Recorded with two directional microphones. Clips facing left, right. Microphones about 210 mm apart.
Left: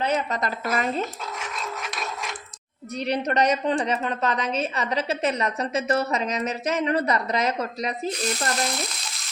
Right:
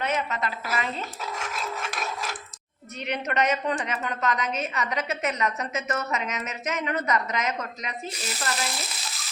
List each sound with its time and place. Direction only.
0.0 s a woman's voice: 35° left (ahead or behind)
1.4 s filing: centre (ahead or behind)
3.0 s a woman's voice: 35° left (ahead or behind)
8.1 s frying: 5° right (ahead or behind)